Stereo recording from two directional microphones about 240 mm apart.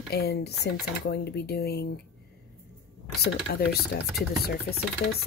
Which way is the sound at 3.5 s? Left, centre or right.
Left.